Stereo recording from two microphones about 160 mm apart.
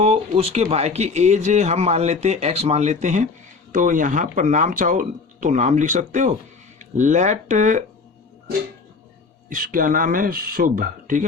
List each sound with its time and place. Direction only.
0.0 s speech: 40° right (ahead or behind)
9.5 s speech: 60° right (ahead or behind)